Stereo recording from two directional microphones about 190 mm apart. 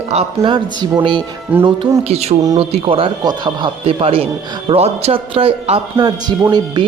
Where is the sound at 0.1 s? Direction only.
30° right (ahead or behind).